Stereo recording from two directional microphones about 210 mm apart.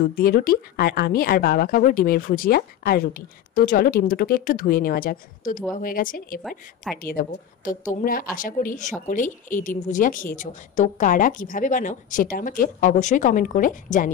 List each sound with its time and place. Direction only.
0.1 s a woman's voice: 45° left (ahead or behind)